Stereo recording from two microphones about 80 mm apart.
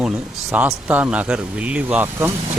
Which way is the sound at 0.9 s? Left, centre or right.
Centre.